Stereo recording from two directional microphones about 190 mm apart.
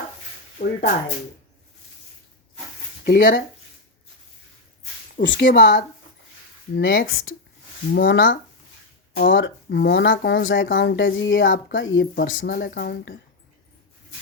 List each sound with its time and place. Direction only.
0.6 s speech: 55° left (ahead or behind)
3.0 s speech: 55° left (ahead or behind)
5.4 s speech: 50° left (ahead or behind)
6.7 s speech: 65° left (ahead or behind); by 7.3 s 90° left
7.9 s speech: 80° left
9.1 s speech: 50° left (ahead or behind)
9.4 s speech: 65° left (ahead or behind)
10.6 s speech: 55° left (ahead or behind); by 12.5 s 80° left
12.5 s speech: 55° left (ahead or behind)